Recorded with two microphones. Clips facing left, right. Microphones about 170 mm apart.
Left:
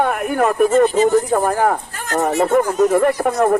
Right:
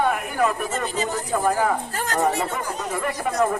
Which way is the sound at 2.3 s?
45° left (ahead or behind).